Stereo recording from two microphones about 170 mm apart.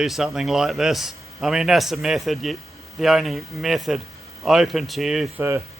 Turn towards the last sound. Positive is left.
turn(degrees=-15)  # may be behind; listen again after turning